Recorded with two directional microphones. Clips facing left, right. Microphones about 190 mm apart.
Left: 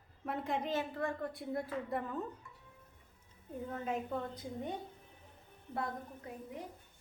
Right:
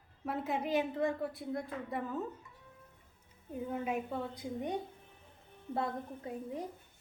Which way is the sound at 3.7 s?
10° right (ahead or behind).